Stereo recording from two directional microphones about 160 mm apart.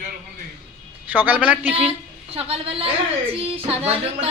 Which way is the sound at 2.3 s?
40° right (ahead or behind).